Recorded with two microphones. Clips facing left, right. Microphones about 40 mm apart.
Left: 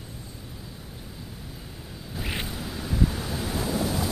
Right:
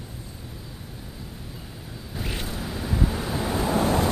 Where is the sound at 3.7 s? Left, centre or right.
Right.